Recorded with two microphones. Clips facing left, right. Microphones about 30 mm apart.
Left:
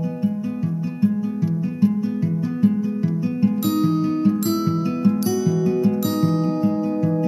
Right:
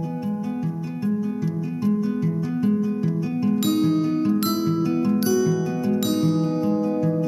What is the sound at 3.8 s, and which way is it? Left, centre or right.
Music, centre.